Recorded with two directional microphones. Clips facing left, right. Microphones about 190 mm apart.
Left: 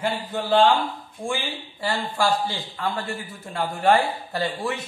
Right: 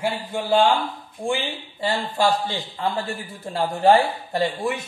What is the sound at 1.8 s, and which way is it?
Speech, 25° right (ahead or behind).